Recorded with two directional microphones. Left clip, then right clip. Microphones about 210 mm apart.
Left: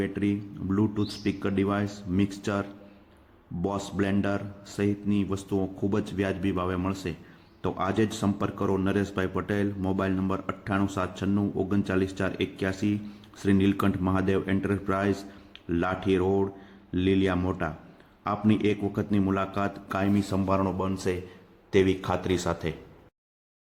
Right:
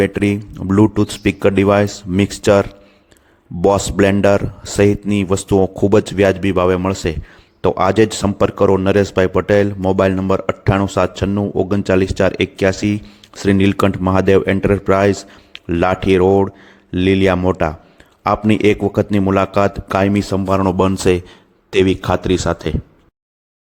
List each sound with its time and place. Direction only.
0.0 s speech: 50° right (ahead or behind); by 22.7 s 30° right (ahead or behind)